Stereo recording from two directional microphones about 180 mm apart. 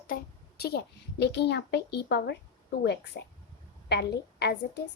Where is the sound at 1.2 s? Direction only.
70° left (ahead or behind).